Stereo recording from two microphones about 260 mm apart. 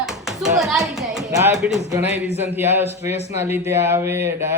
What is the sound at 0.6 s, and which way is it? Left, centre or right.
A woman's voice, centre.